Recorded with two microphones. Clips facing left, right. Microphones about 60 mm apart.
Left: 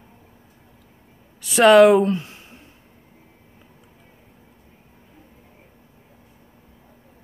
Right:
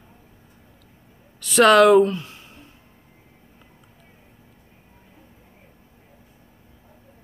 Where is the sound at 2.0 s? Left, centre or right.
Left.